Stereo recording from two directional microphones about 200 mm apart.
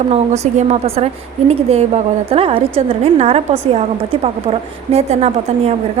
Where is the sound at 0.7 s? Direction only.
30° right (ahead or behind).